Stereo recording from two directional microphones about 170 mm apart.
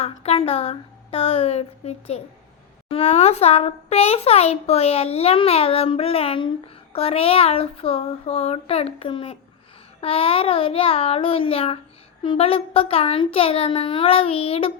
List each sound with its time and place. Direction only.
0.0 s a child's voice: 35° left (ahead or behind)